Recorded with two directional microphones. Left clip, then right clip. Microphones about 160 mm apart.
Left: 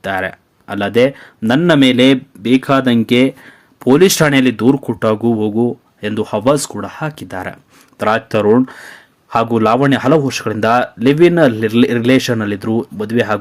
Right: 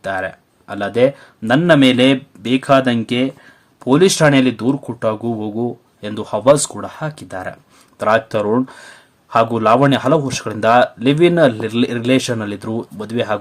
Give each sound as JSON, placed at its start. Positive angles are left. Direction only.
{"t": 0.0, "sound": "speech", "side_deg": 20}
{"t": 2.4, "sound": "speech", "side_deg": 5}